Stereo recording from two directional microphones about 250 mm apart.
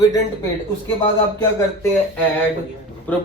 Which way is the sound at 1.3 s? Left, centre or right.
Centre.